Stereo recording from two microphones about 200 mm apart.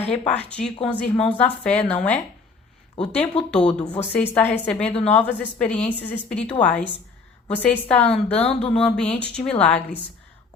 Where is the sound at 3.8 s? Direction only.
30° left (ahead or behind).